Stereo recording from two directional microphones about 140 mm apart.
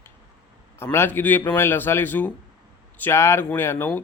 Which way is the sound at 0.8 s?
15° left (ahead or behind).